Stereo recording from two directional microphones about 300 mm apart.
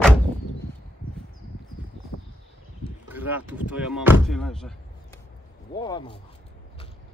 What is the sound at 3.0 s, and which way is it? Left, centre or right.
Speech, centre.